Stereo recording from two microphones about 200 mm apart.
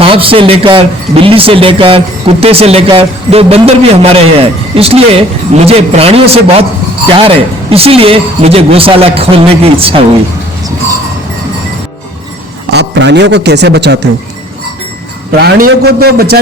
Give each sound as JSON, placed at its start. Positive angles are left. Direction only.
{"t": 0.0, "sound": "speech", "side_deg": -25}
{"t": 12.7, "sound": "a man's voice", "side_deg": -60}
{"t": 15.4, "sound": "a man's voice", "side_deg": -50}